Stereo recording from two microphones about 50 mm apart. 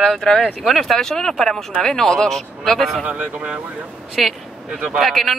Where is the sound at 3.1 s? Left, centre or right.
Right.